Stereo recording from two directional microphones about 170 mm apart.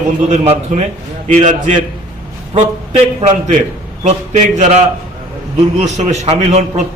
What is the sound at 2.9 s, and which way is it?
A man's voice, 45° right (ahead or behind).